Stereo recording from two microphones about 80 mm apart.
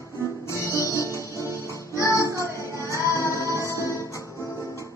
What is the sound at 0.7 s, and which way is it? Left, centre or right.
Music, left.